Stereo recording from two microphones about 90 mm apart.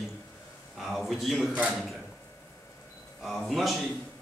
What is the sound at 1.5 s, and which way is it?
Speech, 15° right (ahead or behind).